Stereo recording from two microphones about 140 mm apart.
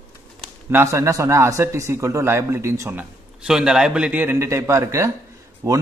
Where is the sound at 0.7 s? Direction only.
20° right (ahead or behind).